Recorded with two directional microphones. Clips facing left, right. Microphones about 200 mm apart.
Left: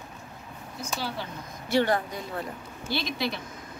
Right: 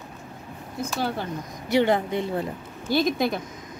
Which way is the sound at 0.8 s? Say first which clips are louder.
Right 6 dB; 50° right (ahead or behind).